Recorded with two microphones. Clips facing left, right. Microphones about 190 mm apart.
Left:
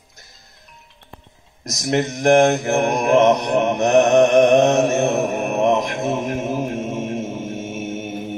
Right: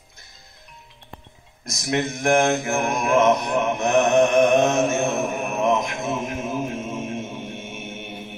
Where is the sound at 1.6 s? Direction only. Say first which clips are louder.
Left 4 dB; 40° left (ahead or behind).